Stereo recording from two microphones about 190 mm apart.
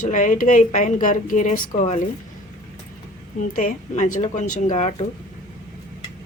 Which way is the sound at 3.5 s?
45° left (ahead or behind).